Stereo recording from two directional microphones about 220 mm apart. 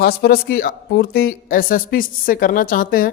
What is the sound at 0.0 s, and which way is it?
A woman's voice, 45° left (ahead or behind).